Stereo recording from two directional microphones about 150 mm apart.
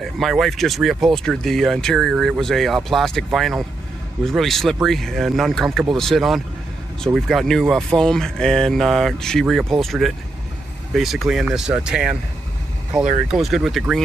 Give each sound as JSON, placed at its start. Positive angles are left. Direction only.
{"t": 0.0, "sound": "speech", "side_deg": 0}